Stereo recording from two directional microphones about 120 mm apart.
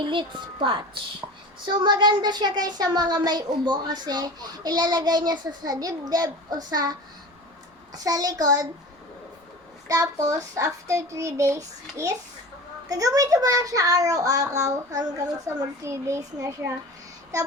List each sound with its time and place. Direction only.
0.0 s a woman's voice: 40° right (ahead or behind)
7.9 s speech: 30° right (ahead or behind)
9.9 s a child's voice: 30° right (ahead or behind)